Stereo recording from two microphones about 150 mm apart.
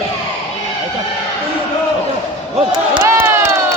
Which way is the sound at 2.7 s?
25° right (ahead or behind).